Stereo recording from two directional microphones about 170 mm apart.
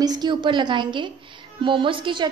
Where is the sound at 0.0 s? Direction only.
25° right (ahead or behind).